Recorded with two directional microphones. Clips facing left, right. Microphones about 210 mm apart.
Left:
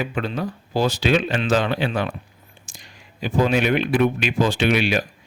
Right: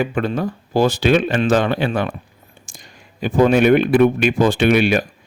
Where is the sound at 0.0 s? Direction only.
50° right (ahead or behind).